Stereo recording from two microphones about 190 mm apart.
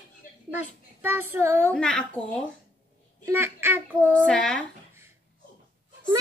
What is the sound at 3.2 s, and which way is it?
Speech, 10° right (ahead or behind).